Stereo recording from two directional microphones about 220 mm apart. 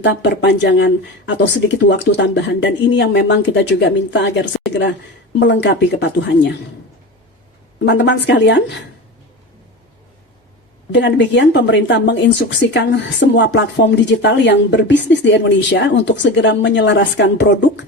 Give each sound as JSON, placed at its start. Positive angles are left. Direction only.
{"t": 0.0, "sound": "speech", "side_deg": 50}
{"t": 7.9, "sound": "speech", "side_deg": 55}
{"t": 10.9, "sound": "speech", "side_deg": 55}